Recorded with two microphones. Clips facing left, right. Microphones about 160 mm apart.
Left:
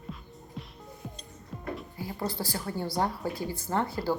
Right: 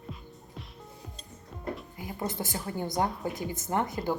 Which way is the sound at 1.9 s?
20° right (ahead or behind).